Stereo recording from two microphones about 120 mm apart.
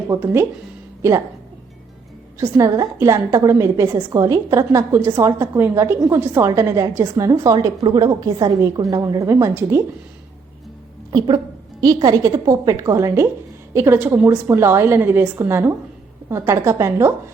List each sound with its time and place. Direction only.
0.1 s a woman's voice: 25° right (ahead or behind)
2.4 s a woman's voice: 25° right (ahead or behind)
11.8 s a woman's voice: 35° right (ahead or behind)